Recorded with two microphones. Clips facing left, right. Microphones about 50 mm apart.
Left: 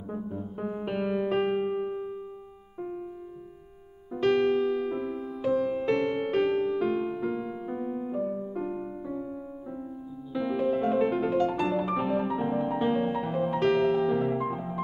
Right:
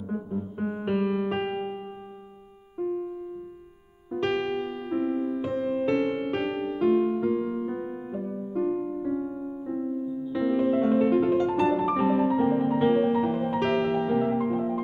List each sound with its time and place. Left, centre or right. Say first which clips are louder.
0.1 s music: right 3 dB; centre
4.1 s music: left 3 dB; centre
5.4 s music: even; centre
6.5 s music: left 3 dB; right
6.8 s music: right 5 dB; centre